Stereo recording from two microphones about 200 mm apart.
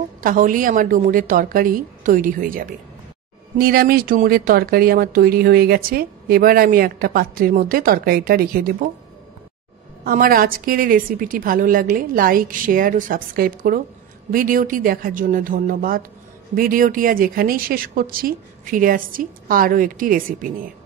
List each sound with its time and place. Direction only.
0.2 s speech: 45° right (ahead or behind)
10.0 s speech: 45° right (ahead or behind)